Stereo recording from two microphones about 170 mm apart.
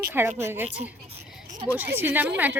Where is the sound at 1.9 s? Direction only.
10° right (ahead or behind).